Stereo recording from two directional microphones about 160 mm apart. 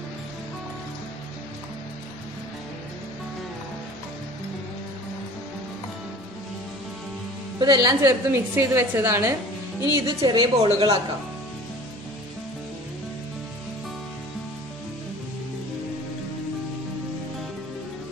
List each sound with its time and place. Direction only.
7.6 s a woman's voice: 25° right (ahead or behind)